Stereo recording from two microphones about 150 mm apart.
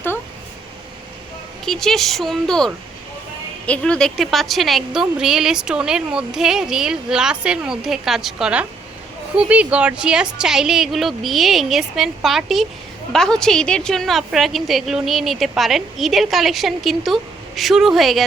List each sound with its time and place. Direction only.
1.6 s a woman's voice: 5° left (ahead or behind)